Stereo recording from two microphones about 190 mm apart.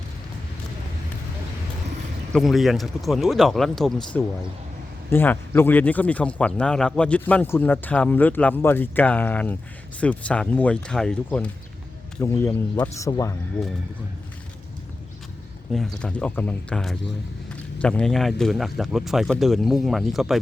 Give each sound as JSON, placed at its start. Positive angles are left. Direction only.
{"t": 2.3, "sound": "speech", "side_deg": 0}
{"t": 15.7, "sound": "speech", "side_deg": 0}